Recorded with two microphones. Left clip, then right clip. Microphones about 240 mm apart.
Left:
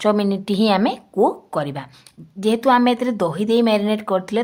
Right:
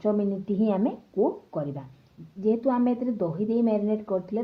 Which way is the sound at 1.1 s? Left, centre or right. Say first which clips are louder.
Left 8 dB; left.